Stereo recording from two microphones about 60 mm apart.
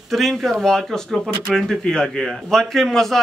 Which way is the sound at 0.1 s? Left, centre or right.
Centre.